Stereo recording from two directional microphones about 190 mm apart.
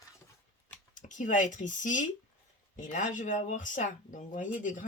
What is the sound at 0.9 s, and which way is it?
Speech, 40° left (ahead or behind).